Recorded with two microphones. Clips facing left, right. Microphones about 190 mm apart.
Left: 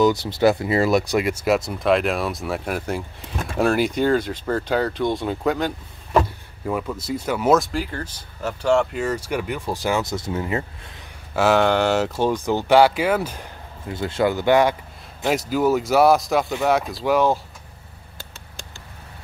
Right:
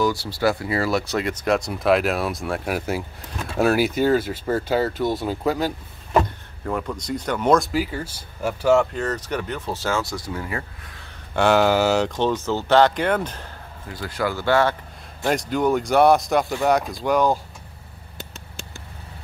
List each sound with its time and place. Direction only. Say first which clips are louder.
0.0 s speech: left 4 dB; 20° left (ahead or behind); by 8.8 s 10° right (ahead or behind)
8.9 s speech: left 2 dB; 10° left (ahead or behind)
11.3 s speech: even; centre (ahead or behind)
13.8 s speech: left 5 dB; 25° left (ahead or behind)
15.2 s speech: left 1 dB; 5° left (ahead or behind)